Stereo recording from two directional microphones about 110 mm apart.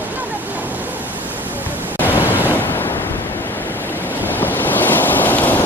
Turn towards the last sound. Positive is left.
turn(degrees=15)  # may be behind; listen again after turning